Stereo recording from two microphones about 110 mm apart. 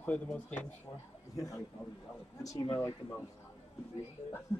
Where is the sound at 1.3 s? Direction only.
30° left (ahead or behind).